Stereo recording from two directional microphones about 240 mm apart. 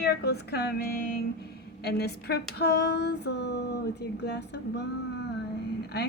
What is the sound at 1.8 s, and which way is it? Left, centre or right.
Speech, left.